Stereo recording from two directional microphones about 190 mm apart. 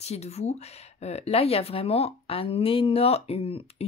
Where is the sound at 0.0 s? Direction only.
35° left (ahead or behind).